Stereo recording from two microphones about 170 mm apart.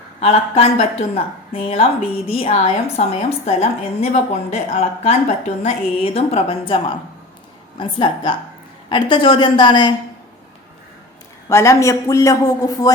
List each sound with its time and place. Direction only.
0.2 s a woman's voice: 35° left (ahead or behind)
11.4 s a man's voice: 15° left (ahead or behind)